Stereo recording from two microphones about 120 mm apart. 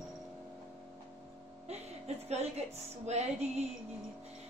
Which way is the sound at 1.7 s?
65° right (ahead or behind).